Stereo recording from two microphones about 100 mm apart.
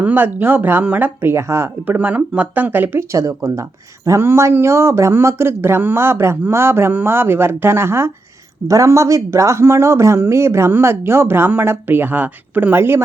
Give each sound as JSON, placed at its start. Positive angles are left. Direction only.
{"t": 0.0, "sound": "speech", "side_deg": -20}